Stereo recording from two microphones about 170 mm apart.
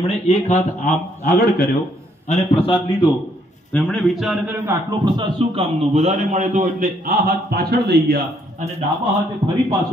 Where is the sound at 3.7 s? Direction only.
Centre (ahead or behind).